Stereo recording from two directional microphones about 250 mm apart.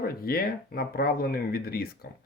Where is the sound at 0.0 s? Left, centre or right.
Left.